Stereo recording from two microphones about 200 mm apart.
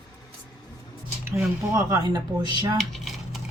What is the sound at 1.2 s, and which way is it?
Speech, 15° right (ahead or behind).